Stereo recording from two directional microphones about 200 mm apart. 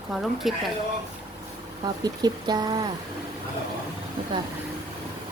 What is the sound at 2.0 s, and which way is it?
Speech, 20° right (ahead or behind).